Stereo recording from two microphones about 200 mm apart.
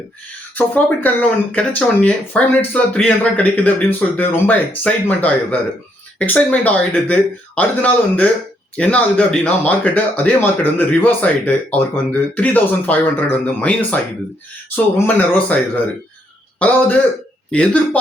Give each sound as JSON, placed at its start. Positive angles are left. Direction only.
{"t": 0.5, "sound": "speech", "side_deg": 10}